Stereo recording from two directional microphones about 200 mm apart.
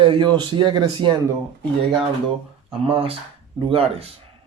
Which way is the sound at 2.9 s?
25° right (ahead or behind).